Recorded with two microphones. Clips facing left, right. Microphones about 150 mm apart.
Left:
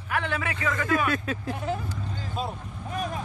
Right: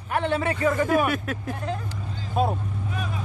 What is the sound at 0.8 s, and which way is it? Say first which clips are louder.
Speech: right 3 dB; 5° right (ahead or behind).